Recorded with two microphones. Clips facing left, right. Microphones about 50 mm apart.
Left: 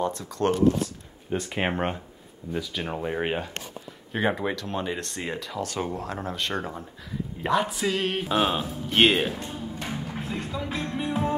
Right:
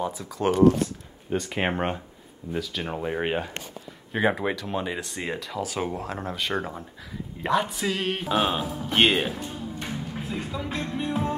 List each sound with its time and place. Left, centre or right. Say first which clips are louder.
0.0 s speech: left 1 dB; centre
8.9 s music: left 1 dB; centre